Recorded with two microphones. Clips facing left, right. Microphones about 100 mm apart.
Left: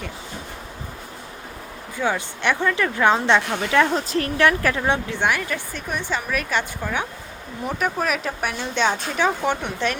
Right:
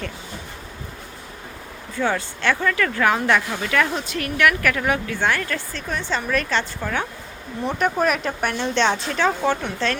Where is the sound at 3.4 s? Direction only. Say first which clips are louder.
Left 2 dB; 70° left (ahead or behind).